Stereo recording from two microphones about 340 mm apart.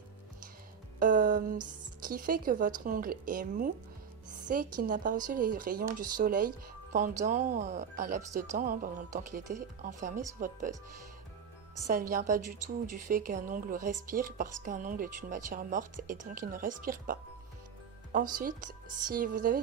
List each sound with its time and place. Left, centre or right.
0.9 s music: right
2.0 s speech: right
11.9 s speech: right
18.3 s speech: right